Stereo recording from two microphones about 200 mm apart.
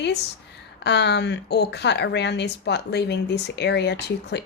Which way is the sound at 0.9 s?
55° left (ahead or behind).